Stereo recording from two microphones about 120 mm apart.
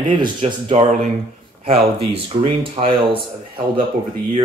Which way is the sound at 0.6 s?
65° right (ahead or behind).